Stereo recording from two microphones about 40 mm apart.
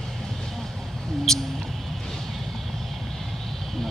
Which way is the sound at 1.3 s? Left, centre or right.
Centre.